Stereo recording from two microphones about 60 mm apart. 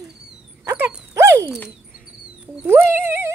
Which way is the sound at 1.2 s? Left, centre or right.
Right.